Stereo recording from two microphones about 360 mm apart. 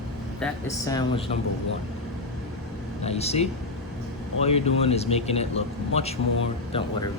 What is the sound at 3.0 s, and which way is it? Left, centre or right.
A man's voice, centre.